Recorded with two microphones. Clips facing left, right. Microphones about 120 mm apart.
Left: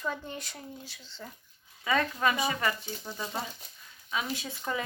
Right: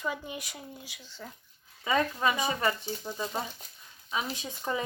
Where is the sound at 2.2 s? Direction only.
20° right (ahead or behind).